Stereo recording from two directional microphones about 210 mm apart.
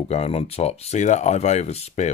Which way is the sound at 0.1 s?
30° left (ahead or behind).